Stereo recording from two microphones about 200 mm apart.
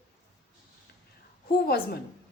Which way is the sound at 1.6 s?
50° left (ahead or behind).